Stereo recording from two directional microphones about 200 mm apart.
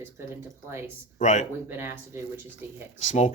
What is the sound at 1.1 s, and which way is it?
Speech, 35° left (ahead or behind).